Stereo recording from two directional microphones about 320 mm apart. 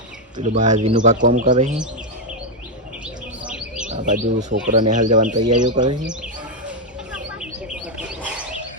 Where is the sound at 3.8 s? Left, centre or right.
Right.